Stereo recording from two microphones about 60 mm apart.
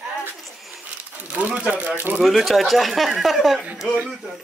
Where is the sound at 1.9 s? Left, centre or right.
Right.